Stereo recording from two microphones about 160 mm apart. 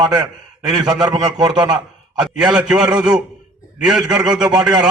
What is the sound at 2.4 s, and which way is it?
A man's voice, 5° right (ahead or behind).